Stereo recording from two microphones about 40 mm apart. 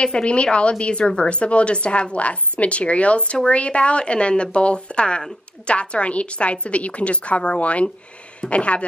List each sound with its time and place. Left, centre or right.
0.0 s a woman's voice: left